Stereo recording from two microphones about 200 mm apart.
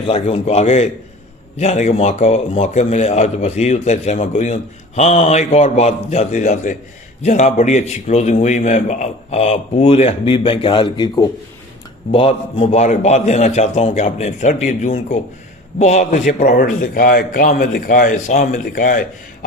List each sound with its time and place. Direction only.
0.0 s a man's voice: 30° left (ahead or behind)